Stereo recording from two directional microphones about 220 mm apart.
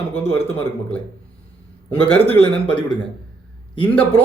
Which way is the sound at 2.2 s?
25° left (ahead or behind).